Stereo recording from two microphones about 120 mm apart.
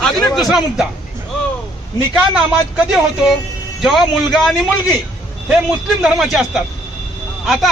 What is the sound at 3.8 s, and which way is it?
Speech, centre (ahead or behind).